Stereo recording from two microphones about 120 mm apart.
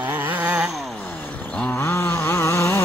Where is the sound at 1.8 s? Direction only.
20° left (ahead or behind).